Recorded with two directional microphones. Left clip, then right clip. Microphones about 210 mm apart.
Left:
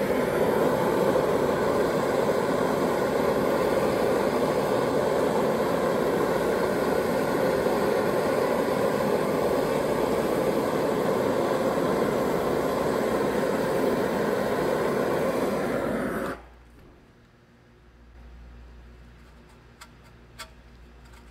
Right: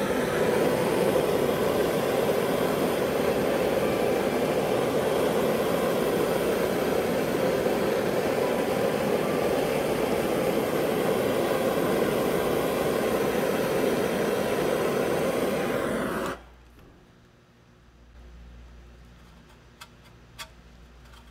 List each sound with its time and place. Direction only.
0.0 s vehicle: 15° right (ahead or behind)